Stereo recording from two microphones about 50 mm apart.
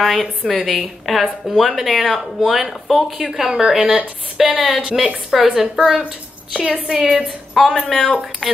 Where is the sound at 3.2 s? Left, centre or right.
Centre.